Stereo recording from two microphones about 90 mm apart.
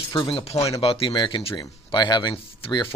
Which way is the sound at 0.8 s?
90° left.